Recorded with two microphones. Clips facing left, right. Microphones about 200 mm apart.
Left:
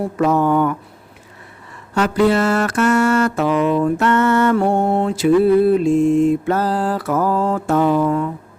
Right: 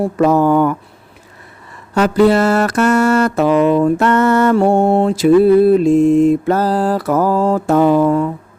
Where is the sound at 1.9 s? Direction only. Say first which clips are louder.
Right 4 dB; 40° right (ahead or behind).